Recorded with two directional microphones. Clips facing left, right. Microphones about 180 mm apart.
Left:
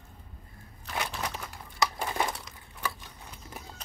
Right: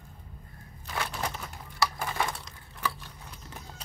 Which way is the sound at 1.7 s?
20° left (ahead or behind).